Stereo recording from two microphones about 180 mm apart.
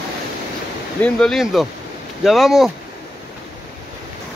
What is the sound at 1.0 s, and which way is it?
Speech, 5° left (ahead or behind).